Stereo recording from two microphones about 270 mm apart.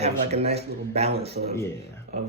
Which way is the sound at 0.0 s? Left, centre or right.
Right.